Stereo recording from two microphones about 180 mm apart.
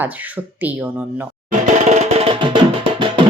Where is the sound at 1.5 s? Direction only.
40° right (ahead or behind).